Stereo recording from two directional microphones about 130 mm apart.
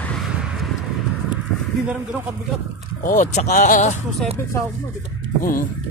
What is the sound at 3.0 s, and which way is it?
Speech, 75° left (ahead or behind).